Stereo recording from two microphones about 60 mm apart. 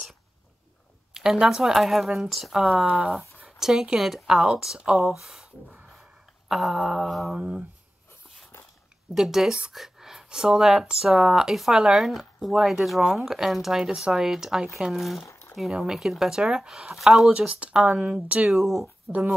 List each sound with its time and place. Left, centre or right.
1.1 s speech: centre
2.9 s speech: centre
3.4 s speech: centre
4.9 s speech: centre
7.3 s speech: centre
9.1 s speech: centre
17.3 s speech: centre
18.5 s speech: centre
19.1 s speech: right